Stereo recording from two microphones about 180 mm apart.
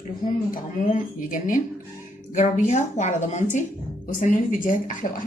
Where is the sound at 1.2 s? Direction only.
50° left (ahead or behind).